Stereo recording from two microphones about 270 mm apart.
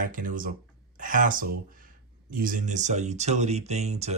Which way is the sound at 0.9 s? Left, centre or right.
Right.